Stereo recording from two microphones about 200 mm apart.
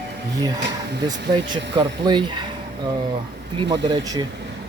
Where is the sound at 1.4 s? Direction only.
20° right (ahead or behind).